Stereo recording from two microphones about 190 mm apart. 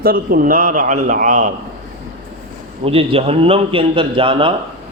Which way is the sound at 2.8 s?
30° right (ahead or behind).